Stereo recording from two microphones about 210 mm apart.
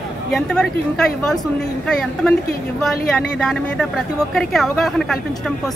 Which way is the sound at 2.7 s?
5° left (ahead or behind).